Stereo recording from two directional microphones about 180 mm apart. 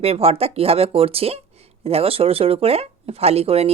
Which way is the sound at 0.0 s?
35° right (ahead or behind).